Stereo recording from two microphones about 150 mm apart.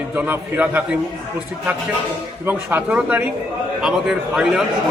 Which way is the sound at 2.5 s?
10° right (ahead or behind).